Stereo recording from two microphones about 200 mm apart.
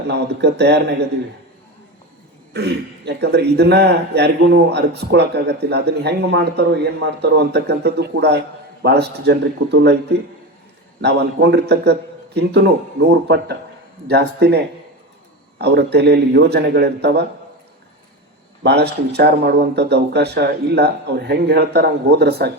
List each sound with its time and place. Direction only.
0.1 s a man's voice: 55° right (ahead or behind)
2.5 s a man's voice: 55° right (ahead or behind)
11.0 s a man's voice: 55° right (ahead or behind)
18.6 s a man's voice: 55° right (ahead or behind)